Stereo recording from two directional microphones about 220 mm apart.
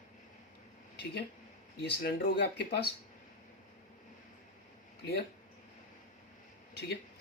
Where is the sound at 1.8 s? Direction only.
45° left (ahead or behind).